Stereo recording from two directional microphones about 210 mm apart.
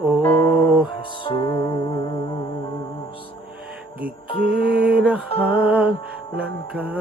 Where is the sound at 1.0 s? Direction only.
25° left (ahead or behind).